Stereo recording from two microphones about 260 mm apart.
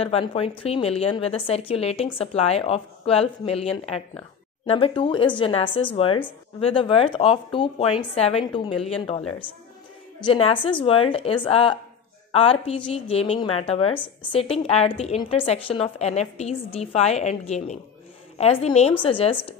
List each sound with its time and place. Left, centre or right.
0.0 s a woman's voice: left
10.2 s a woman's voice: centre